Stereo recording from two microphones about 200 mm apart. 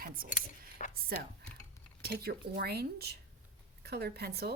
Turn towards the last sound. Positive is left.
turn(degrees=-55)  # may be behind; listen again after turning